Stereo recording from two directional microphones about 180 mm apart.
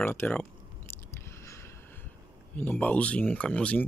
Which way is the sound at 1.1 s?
15° left (ahead or behind).